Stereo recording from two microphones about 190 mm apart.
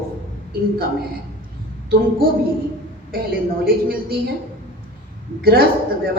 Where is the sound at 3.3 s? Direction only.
50° right (ahead or behind).